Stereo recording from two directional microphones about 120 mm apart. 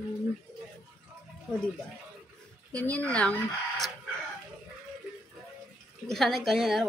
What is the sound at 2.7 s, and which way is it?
Speech, 10° left (ahead or behind).